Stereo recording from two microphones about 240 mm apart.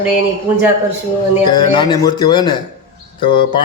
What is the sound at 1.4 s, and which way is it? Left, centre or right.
A man's voice, centre.